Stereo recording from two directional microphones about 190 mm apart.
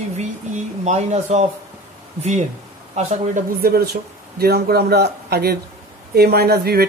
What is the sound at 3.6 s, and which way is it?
A man's voice, 55° right (ahead or behind).